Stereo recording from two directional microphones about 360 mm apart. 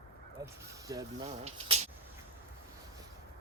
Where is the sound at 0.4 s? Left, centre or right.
Centre.